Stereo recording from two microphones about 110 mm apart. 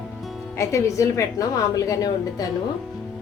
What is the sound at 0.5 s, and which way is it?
A woman's voice, 25° left (ahead or behind).